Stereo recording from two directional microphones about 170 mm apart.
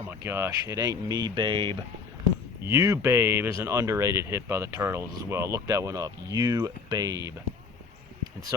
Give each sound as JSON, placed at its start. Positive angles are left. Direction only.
{"t": 0.1, "sound": "speech", "side_deg": -15}
{"t": 2.6, "sound": "speech", "side_deg": -15}